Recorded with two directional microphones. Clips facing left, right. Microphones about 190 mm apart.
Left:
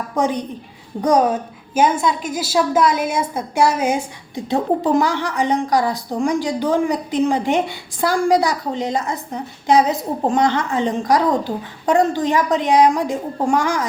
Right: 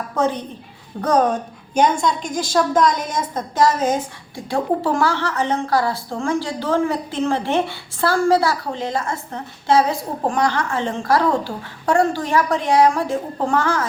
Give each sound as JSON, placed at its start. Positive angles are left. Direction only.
{"t": 0.2, "sound": "a woman's voice", "side_deg": 15}